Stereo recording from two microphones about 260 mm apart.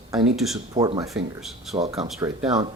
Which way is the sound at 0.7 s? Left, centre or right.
Centre.